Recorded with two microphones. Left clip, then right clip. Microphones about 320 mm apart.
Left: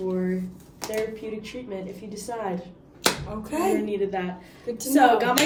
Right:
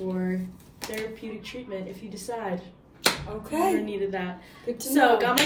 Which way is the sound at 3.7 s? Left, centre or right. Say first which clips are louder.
Left 2 dB; centre.